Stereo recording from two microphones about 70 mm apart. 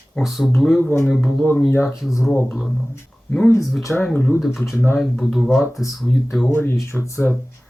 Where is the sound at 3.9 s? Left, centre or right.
Centre.